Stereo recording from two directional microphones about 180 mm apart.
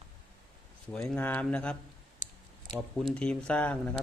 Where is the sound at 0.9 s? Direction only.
5° left (ahead or behind).